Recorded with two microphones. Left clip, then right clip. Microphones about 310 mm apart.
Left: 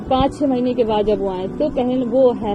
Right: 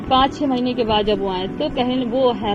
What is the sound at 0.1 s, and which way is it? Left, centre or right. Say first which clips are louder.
A woman's voice: right 1 dB; centre.